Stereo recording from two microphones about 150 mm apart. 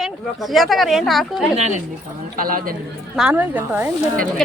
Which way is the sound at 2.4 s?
75° right (ahead or behind).